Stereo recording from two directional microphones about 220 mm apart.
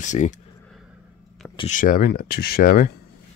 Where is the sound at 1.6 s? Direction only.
35° left (ahead or behind).